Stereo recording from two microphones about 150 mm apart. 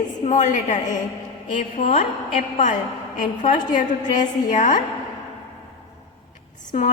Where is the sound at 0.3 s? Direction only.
55° left (ahead or behind).